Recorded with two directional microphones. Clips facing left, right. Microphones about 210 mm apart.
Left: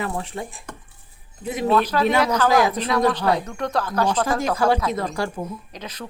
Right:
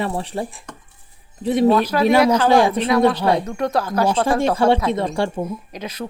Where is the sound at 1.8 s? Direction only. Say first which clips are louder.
Right 3 dB; 10° right (ahead or behind).